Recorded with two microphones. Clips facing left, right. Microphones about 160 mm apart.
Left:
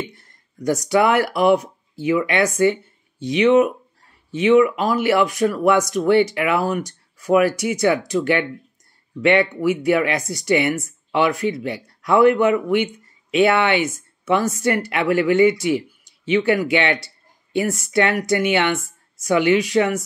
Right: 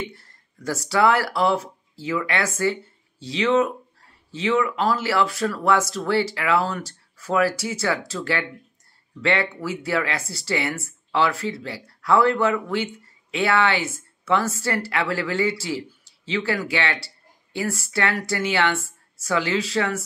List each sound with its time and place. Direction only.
0.1 s speech: 20° left (ahead or behind)